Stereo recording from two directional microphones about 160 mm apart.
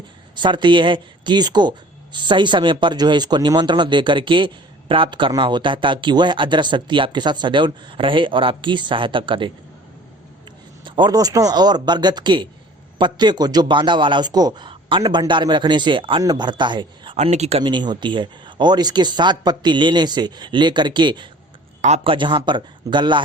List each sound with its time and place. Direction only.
0.3 s speech: 30° right (ahead or behind)
10.8 s speech: 30° right (ahead or behind)
17.2 s speech: 45° right (ahead or behind)
17.6 s speech: 30° right (ahead or behind)
21.8 s a man's voice: 45° right (ahead or behind)